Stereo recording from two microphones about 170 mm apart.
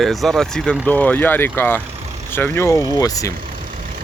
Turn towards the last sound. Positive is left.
turn(degrees=20)  # may be behind; listen again after turning